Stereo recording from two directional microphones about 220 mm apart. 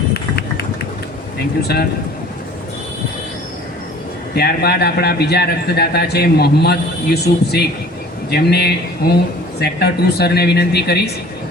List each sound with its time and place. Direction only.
0.1 s run: 45° left (ahead or behind)
1.6 s a man's voice: 45° left (ahead or behind)
4.4 s a man's voice: 45° left (ahead or behind)